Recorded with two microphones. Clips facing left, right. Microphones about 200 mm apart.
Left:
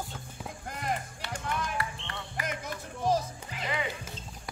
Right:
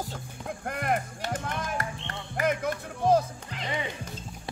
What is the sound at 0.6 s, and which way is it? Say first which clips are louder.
Music: right 6 dB; 60° right (ahead or behind).